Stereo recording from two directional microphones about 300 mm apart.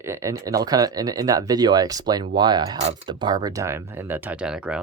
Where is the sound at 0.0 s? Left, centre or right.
Centre.